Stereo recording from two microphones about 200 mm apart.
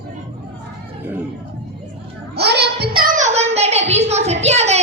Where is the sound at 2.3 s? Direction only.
55° right (ahead or behind).